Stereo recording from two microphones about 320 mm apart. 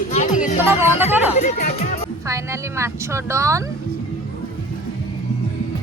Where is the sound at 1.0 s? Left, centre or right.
Centre.